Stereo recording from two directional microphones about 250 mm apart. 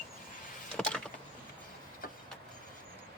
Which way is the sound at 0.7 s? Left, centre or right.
Centre.